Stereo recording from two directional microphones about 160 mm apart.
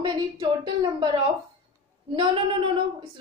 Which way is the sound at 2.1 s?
30° right (ahead or behind).